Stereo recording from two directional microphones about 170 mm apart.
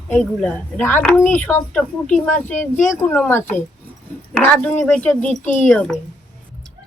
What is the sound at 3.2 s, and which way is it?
Speech, 10° left (ahead or behind).